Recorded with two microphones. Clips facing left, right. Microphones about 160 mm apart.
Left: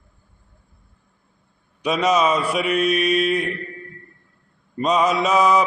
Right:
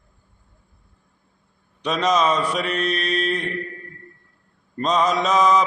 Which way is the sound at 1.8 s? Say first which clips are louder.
Left 1 dB; 10° left (ahead or behind).